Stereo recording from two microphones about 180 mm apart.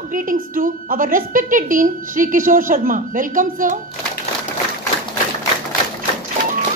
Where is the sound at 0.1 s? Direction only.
50° right (ahead or behind).